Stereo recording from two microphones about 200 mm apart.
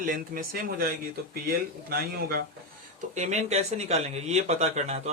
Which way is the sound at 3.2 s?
35° right (ahead or behind).